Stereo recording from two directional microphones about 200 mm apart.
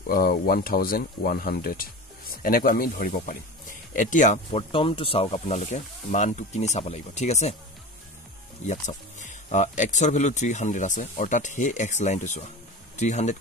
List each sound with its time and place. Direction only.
0.0 s speech: 45° left (ahead or behind)
8.6 s speech: 35° left (ahead or behind)